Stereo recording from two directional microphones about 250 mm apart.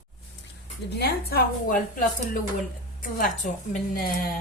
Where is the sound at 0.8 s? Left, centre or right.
Left.